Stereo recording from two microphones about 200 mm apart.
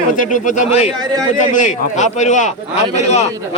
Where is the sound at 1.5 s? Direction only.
35° left (ahead or behind).